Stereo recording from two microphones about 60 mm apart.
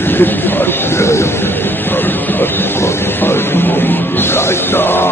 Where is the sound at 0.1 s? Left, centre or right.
Left.